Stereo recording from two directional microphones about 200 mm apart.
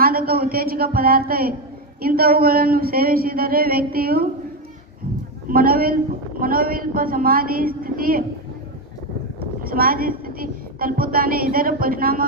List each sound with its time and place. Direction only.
0.0 s speech: 50° right (ahead or behind)
5.5 s speech: 45° right (ahead or behind)
9.6 s a woman's voice: 45° right (ahead or behind)